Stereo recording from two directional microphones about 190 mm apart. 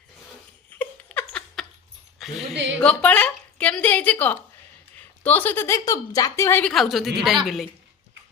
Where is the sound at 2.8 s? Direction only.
10° left (ahead or behind).